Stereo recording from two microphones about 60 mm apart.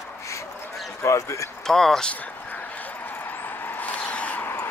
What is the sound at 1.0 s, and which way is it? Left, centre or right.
Speech, left.